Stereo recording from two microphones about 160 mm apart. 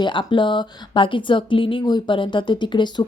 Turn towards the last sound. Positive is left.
turn(degrees=30)  # may be behind; listen again after turning